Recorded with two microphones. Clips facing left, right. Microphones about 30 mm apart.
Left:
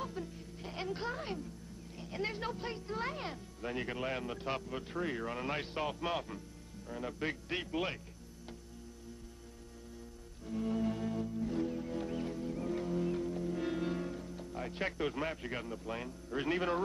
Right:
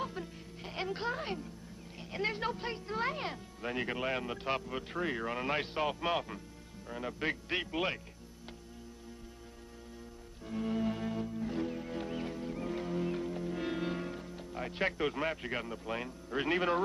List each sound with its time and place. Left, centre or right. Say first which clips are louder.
0.0 s music: right 2 dB; right
2.0 s speech: right 3 dB; right
10.4 s music: right 1 dB; right